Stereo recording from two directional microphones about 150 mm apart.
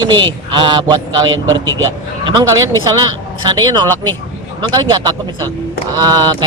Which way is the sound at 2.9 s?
30° right (ahead or behind).